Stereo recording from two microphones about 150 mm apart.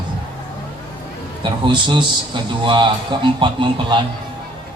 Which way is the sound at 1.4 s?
30° right (ahead or behind).